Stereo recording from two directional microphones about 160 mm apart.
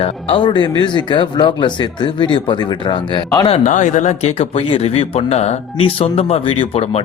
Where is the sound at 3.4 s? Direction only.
40° left (ahead or behind).